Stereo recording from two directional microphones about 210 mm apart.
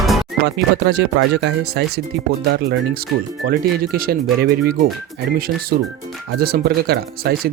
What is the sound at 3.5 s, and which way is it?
Speech, 45° right (ahead or behind).